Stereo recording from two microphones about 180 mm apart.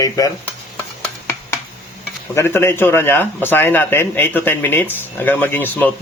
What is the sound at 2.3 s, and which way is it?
A man's voice, 15° left (ahead or behind).